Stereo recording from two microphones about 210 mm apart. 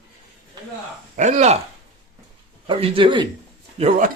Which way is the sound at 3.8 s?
40° right (ahead or behind).